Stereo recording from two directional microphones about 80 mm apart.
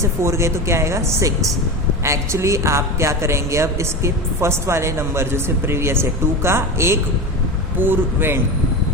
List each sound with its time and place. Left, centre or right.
0.0 s a woman's voice: right